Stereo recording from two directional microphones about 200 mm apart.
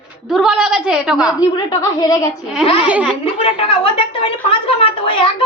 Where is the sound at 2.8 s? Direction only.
5° right (ahead or behind).